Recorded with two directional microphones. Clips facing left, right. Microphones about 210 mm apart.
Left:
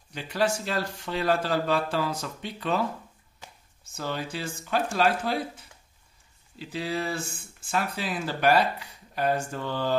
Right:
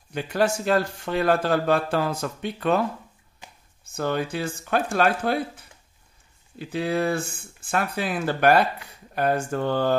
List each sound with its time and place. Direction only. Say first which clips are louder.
0.1 s speech: right 4 dB; 50° right (ahead or behind)
3.9 s speech: right 7 dB; 55° right (ahead or behind)
6.6 s speech: right 6 dB; 55° right (ahead or behind)